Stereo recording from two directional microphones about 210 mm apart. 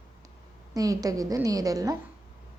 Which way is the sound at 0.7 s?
15° right (ahead or behind).